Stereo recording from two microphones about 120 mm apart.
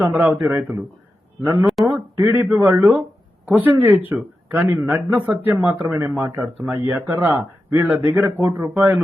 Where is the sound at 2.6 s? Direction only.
20° right (ahead or behind).